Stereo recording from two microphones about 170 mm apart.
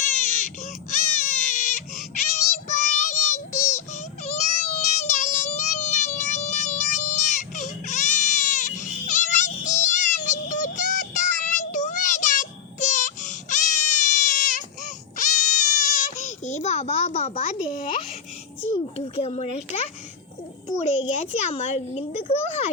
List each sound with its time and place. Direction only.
0.2 s crying: 45° left (ahead or behind)
18.6 s a child's voice: 35° left (ahead or behind)